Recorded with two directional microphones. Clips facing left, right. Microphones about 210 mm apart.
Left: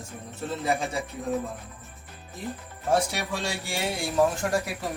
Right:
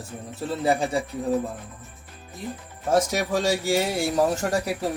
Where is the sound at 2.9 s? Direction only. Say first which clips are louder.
Right 4 dB; 45° right (ahead or behind).